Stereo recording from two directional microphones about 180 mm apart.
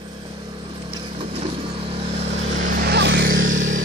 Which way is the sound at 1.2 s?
30° right (ahead or behind).